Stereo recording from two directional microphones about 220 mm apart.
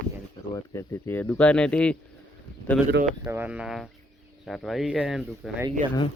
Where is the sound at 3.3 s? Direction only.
5° right (ahead or behind).